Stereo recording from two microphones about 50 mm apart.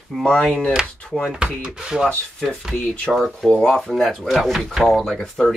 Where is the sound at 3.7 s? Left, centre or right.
Centre.